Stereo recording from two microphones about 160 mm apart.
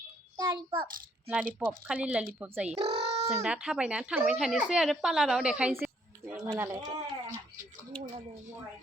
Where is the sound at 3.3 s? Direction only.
5° right (ahead or behind).